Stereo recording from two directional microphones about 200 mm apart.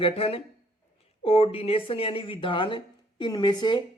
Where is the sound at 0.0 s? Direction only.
30° left (ahead or behind).